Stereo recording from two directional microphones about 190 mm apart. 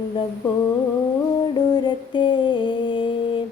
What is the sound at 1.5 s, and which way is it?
Humming, 20° left (ahead or behind).